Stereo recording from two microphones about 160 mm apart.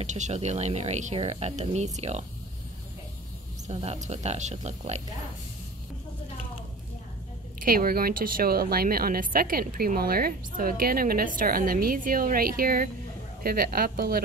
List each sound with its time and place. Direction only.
0.0 s speech: 45° right (ahead or behind)
3.6 s speech: 40° right (ahead or behind)
7.6 s a woman's voice: 65° right (ahead or behind)